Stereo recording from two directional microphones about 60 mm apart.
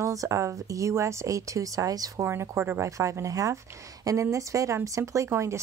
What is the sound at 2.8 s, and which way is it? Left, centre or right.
Speech, right.